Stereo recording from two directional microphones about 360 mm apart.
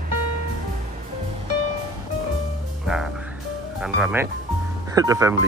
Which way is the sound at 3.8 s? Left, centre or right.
Centre.